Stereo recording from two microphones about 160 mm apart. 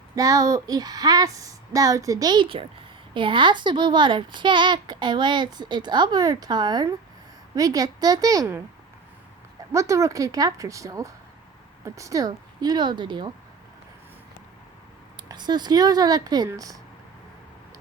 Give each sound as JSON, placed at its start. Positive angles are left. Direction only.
{"t": 0.2, "sound": "speech", "side_deg": -20}
{"t": 9.7, "sound": "speech", "side_deg": -20}
{"t": 15.3, "sound": "speech", "side_deg": -25}